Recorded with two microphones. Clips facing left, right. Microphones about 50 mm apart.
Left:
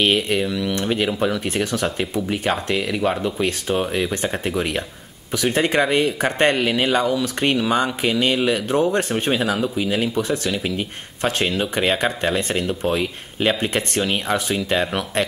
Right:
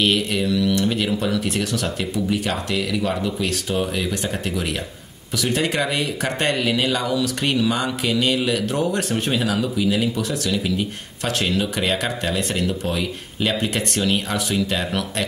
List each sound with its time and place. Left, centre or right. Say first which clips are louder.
0.0 s speech: left 1 dB; left